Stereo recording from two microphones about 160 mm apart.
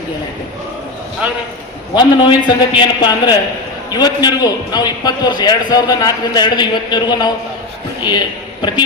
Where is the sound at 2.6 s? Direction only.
30° left (ahead or behind).